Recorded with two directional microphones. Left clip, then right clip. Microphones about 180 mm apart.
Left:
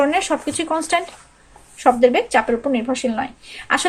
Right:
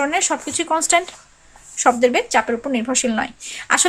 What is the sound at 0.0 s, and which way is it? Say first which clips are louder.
Speech: left 2 dB; 20° right (ahead or behind).